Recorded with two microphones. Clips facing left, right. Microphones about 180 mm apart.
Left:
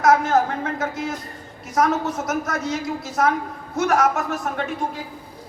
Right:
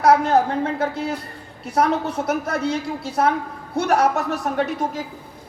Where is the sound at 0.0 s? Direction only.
35° right (ahead or behind).